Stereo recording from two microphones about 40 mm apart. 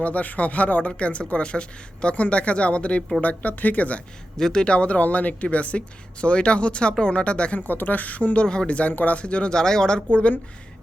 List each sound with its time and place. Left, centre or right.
0.0 s speech: left
4.4 s speech: centre
4.6 s speech: left
7.6 s a woman's voice: left
8.4 s speech: left
8.9 s a woman's voice: left
9.1 s speech: left